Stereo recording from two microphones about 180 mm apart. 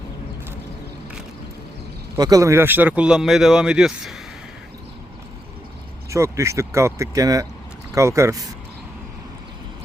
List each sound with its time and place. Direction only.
2.1 s speech: 20° right (ahead or behind); by 4.2 s 5° right (ahead or behind)
6.1 s speech: 15° right (ahead or behind)